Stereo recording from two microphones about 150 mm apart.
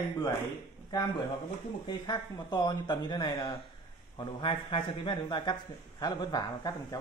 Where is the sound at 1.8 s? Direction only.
30° left (ahead or behind).